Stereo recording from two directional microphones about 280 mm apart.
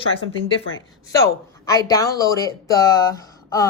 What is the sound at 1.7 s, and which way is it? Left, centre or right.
Speech, centre.